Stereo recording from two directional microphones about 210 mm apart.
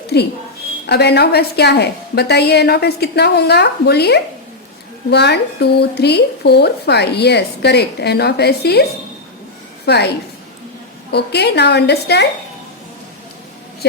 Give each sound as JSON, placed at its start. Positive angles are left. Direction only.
{"t": 0.1, "sound": "a woman's voice", "side_deg": 50}
{"t": 11.1, "sound": "speech", "side_deg": 50}